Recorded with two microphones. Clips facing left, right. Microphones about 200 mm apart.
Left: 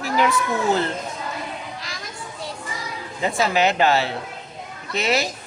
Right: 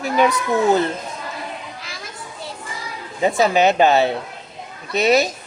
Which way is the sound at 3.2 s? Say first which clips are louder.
Right 4 dB; 20° right (ahead or behind).